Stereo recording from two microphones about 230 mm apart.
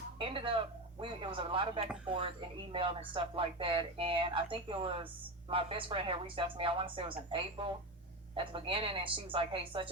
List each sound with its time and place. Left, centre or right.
0.2 s speech: right